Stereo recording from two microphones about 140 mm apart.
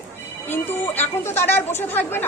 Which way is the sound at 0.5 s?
15° left (ahead or behind).